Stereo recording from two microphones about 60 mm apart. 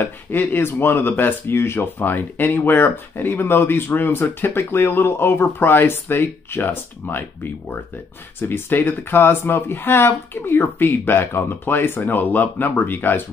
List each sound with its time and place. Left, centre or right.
0.0 s speech: left
2.0 s speech: left
8.4 s speech: left